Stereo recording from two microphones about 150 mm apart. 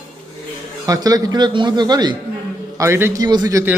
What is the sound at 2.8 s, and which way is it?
Speech, 15° right (ahead or behind).